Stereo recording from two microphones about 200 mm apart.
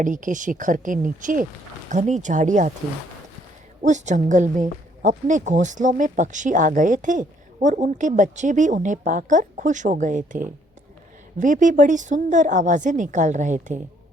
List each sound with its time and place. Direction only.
0.0 s a woman's voice: 40° right (ahead or behind)
3.8 s a woman's voice: 35° right (ahead or behind)